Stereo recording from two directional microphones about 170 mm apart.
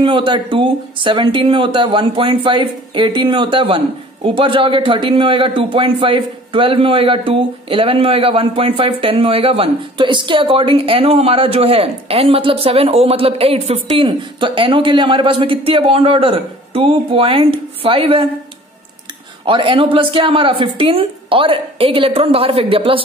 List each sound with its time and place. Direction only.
0.0 s speech: 30° right (ahead or behind)
19.4 s speech: 30° right (ahead or behind)